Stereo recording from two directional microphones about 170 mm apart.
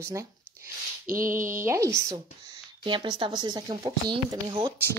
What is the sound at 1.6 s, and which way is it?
Speech, 15° right (ahead or behind).